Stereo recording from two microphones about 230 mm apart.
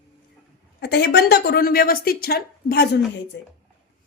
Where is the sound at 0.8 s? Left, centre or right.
Left.